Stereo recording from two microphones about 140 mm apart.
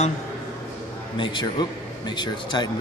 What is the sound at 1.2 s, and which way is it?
A man's voice, 35° left (ahead or behind).